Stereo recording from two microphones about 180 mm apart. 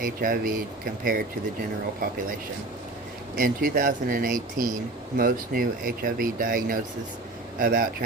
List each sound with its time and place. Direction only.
0.0 s speech: 50° right (ahead or behind)
3.3 s speech: 50° right (ahead or behind)